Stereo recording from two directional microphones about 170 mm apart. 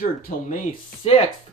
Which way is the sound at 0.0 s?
55° left (ahead or behind).